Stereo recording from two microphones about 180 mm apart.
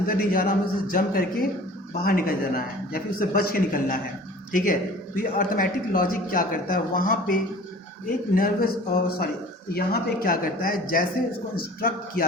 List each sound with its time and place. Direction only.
0.2 s a man's voice: 50° left (ahead or behind)
8.4 s a man's voice: 55° left (ahead or behind)